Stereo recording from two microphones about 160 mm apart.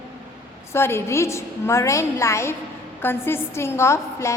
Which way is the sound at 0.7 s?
15° left (ahead or behind).